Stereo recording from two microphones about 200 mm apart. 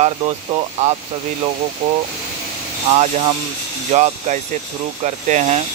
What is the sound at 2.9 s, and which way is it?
Speech, 30° right (ahead or behind).